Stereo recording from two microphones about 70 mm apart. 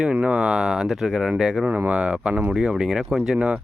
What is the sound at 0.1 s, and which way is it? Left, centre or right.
Speech, centre.